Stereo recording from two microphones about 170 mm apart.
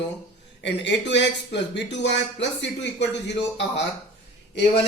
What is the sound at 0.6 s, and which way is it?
Speech, 90° left.